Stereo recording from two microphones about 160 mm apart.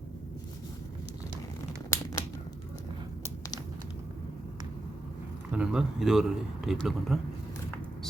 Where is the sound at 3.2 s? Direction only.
20° left (ahead or behind).